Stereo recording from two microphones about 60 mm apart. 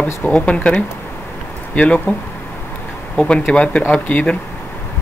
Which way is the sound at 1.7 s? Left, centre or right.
Centre.